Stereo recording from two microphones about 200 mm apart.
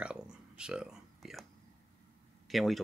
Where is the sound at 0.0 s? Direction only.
5° right (ahead or behind).